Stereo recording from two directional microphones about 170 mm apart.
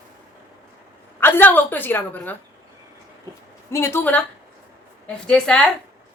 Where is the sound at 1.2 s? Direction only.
10° left (ahead or behind).